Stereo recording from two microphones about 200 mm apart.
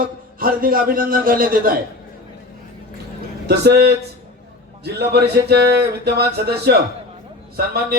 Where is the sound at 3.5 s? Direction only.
55° right (ahead or behind).